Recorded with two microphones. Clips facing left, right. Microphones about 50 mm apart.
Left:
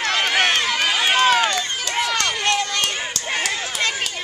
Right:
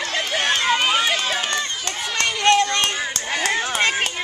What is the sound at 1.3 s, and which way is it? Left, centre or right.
Run, left.